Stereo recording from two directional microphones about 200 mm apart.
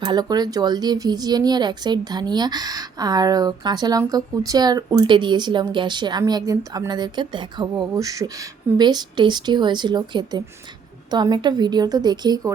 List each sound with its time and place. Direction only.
0.0 s speech: 20° right (ahead or behind)